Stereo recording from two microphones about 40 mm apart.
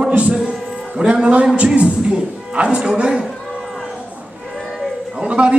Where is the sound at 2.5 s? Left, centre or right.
Right.